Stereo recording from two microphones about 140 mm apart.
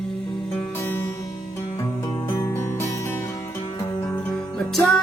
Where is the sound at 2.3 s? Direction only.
20° left (ahead or behind).